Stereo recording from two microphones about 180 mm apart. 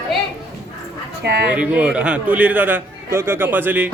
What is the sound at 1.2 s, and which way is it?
Speech, 70° right (ahead or behind).